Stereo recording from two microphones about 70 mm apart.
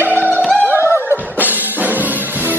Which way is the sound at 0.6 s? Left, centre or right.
Right.